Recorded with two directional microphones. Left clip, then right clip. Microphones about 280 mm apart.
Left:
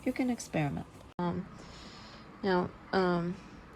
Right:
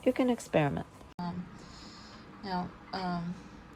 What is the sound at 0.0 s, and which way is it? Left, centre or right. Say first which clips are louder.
Speech: right 5 dB; right.